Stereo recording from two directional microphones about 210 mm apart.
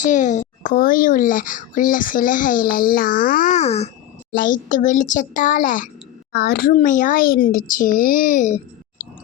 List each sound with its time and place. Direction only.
0.0 s a child's voice: 35° left (ahead or behind)